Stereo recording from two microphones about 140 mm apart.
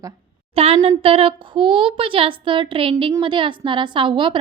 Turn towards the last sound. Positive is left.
turn(degrees=-35)  # may be behind; listen again after turning